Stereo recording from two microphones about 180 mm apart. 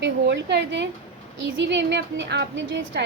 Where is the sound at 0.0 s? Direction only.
75° right (ahead or behind).